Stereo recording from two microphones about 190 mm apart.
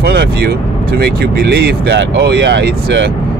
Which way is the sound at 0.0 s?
55° right (ahead or behind).